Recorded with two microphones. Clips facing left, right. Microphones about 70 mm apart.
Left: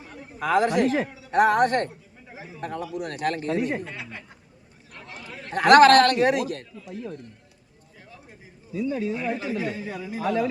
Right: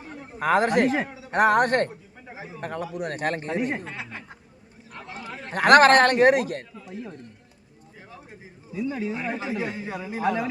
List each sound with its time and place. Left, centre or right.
0.3 s a man's voice: right
0.9 s speech: right
1.3 s a man's voice: right
2.2 s a sound: right
2.6 s speech: right
4.9 s a sound: right
5.6 s speech: right
8.7 s speech: centre